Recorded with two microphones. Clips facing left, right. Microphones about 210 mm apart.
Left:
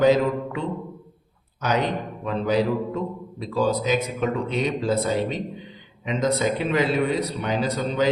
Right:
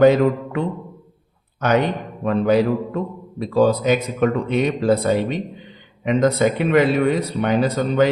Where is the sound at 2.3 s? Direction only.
60° right (ahead or behind).